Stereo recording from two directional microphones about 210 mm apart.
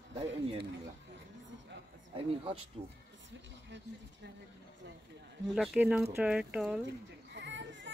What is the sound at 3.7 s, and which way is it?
Speech, 55° right (ahead or behind).